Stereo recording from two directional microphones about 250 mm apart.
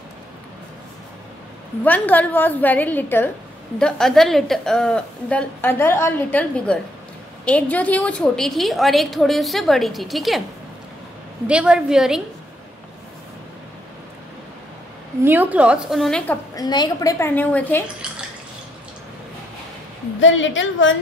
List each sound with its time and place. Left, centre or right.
1.9 s a woman's voice: centre
11.4 s a woman's voice: centre
15.2 s a woman's voice: centre
16.5 s a woman's voice: centre
20.2 s a woman's voice: left